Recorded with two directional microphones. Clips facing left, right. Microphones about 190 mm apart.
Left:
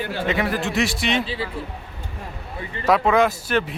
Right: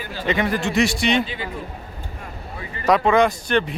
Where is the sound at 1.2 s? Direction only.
30° left (ahead or behind).